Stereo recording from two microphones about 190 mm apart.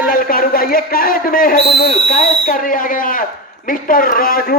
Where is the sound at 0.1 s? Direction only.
50° left (ahead or behind).